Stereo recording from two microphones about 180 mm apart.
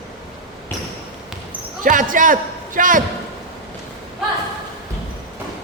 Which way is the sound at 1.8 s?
50° right (ahead or behind).